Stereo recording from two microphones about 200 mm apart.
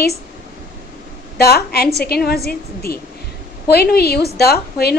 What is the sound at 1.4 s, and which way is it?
A woman's voice, 50° left (ahead or behind).